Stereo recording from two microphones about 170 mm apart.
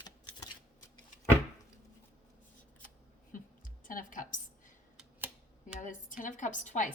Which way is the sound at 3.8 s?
50° left (ahead or behind).